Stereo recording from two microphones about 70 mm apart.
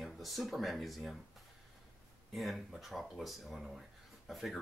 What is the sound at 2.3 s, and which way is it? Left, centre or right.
Speech, centre.